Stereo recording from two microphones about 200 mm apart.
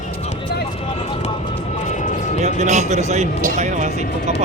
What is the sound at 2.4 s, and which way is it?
Speech, 35° right (ahead or behind).